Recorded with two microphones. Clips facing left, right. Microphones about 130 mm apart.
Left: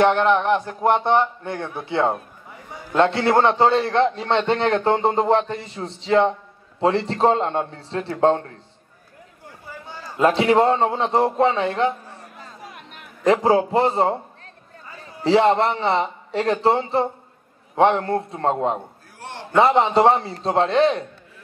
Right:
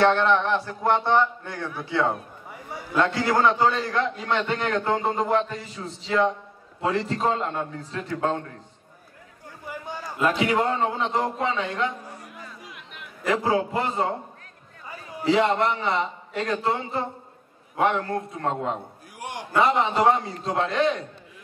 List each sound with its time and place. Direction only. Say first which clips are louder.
0.0 s a man's voice: left 3 dB; 15° left (ahead or behind)
9.7 s a sound: right 3 dB; 15° right (ahead or behind)
10.1 s a man's voice: left 6 dB; 30° left (ahead or behind)
12.0 s music: right 1 dB; 10° right (ahead or behind)
12.4 s chatter: left 2 dB; 40° left (ahead or behind)
13.3 s a man's voice: left 6 dB; 30° left (ahead or behind)
15.2 s a man's voice: left 4 dB; 30° left (ahead or behind)
19.1 s a sound: right 2 dB; 10° right (ahead or behind)
19.5 s a man's voice: left 5 dB; 30° left (ahead or behind)